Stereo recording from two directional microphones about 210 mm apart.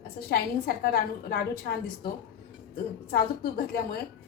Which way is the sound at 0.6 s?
45° left (ahead or behind).